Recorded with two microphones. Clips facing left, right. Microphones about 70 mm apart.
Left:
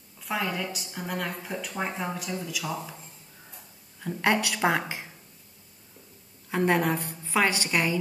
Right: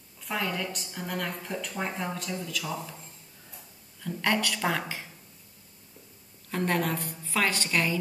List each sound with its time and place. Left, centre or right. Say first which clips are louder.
0.2 s a woman's voice: left 1 dB; centre; by 5.1 s left
6.5 s a woman's voice: left 4 dB; centre